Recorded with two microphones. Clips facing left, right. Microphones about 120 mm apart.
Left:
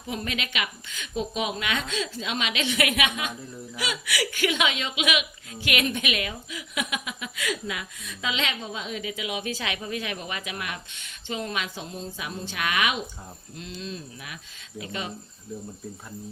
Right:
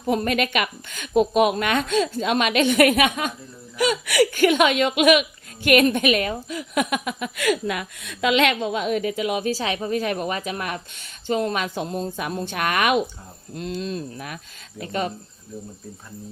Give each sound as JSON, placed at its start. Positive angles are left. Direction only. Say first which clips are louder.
{"t": 0.0, "sound": "a woman's voice", "louder": "right 10 dB", "side_deg": -50}